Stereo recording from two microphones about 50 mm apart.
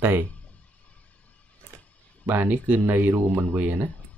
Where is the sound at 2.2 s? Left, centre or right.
Right.